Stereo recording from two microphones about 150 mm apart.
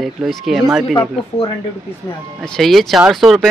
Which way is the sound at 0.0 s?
Centre (ahead or behind).